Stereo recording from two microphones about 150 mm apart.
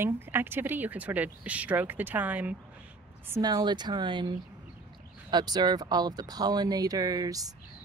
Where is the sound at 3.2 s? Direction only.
20° right (ahead or behind).